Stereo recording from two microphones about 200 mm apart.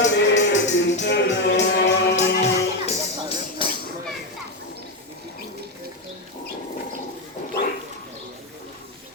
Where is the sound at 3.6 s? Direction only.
25° left (ahead or behind).